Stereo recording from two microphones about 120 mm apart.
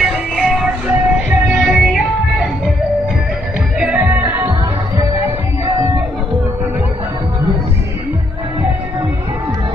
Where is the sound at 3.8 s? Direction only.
10° right (ahead or behind).